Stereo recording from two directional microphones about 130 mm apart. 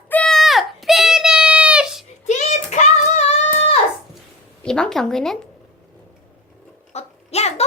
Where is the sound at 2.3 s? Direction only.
65° left (ahead or behind).